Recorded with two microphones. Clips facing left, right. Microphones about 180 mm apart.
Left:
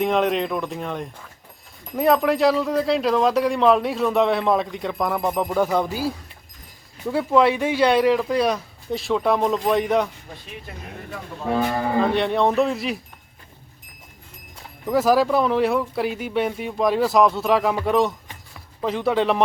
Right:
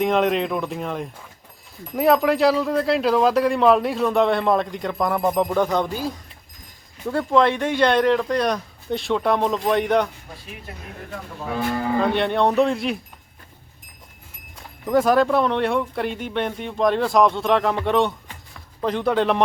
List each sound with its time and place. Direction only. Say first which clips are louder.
0.0 s speech: right 1 dB; centre (ahead or behind)
11.9 s speech: even; centre (ahead or behind)
14.8 s speech: right 1 dB; 5° left (ahead or behind)